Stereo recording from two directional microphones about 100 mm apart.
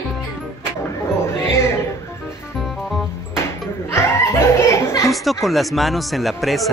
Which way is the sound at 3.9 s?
30° left (ahead or behind).